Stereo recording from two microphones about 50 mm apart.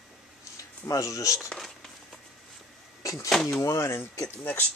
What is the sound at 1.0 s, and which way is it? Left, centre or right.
Speech, left.